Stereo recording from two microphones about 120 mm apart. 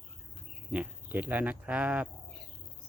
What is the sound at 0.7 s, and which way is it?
Speech, 10° right (ahead or behind).